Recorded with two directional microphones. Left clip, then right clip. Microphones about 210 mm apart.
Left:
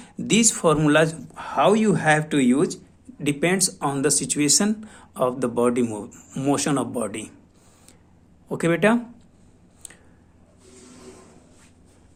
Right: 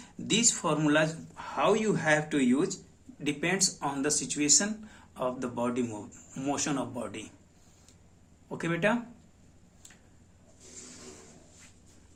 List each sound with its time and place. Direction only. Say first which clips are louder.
0.0 s speech: left 7 dB; 50° left (ahead or behind)
8.4 s speech: left 9 dB; 50° left (ahead or behind)